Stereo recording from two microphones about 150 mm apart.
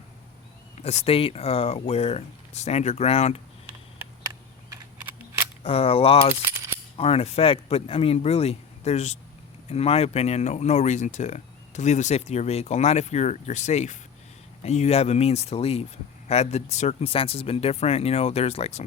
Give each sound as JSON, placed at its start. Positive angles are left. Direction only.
{"t": 0.8, "sound": "speech", "side_deg": 45}
{"t": 5.6, "sound": "speech", "side_deg": 40}